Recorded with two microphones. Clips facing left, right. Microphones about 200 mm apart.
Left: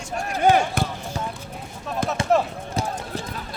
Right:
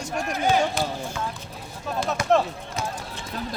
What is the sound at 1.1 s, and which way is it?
Clip-clop, 40° left (ahead or behind).